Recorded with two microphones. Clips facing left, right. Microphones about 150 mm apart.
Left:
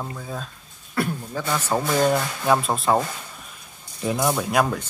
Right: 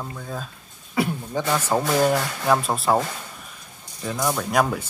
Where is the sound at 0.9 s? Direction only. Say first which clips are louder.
Right 2 dB; 10° right (ahead or behind).